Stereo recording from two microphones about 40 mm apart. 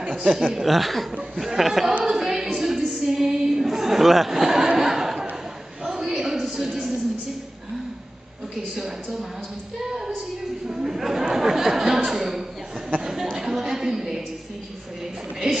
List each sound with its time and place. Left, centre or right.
0.0 s speech: centre
2.0 s music: centre
3.1 s chuckle: centre
5.9 s a sound: centre
10.7 s a man's voice: centre
13.0 s a sound: centre
15.4 s speech: centre